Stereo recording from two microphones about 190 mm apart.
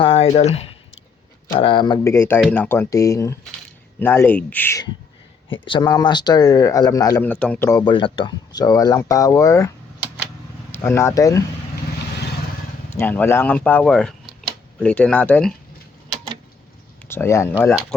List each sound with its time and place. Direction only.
0.0 s speech: 30° left (ahead or behind); by 4.9 s 10° left (ahead or behind)
5.6 s speech: 25° left (ahead or behind)
7.3 s speech: 5° left (ahead or behind)
12.9 s speech: 10° left (ahead or behind)
17.1 s speech: 15° left (ahead or behind)